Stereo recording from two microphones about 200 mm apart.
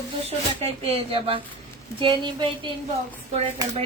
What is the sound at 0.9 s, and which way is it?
A woman's voice, 30° right (ahead or behind).